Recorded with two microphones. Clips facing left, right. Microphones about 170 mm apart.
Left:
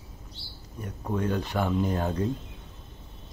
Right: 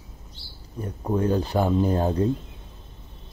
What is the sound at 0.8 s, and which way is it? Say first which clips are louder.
Speech: right 5 dB; 30° right (ahead or behind).